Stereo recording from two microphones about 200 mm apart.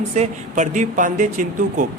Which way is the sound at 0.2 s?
40° right (ahead or behind).